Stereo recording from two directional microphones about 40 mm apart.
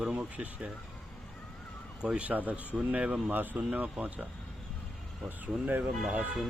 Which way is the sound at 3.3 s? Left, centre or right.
Right.